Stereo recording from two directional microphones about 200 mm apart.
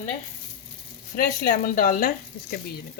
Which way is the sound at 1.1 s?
45° left (ahead or behind).